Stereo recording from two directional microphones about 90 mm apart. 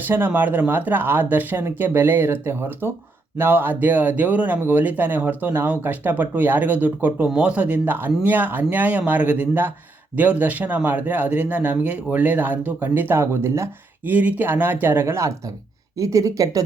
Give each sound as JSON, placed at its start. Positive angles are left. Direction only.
{"t": 0.0, "sound": "speech", "side_deg": -25}
{"t": 14.0, "sound": "speech", "side_deg": -20}